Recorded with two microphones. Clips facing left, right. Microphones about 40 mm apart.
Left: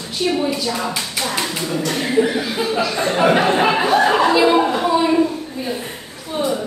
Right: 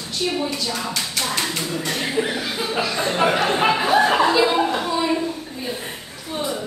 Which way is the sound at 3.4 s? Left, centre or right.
Left.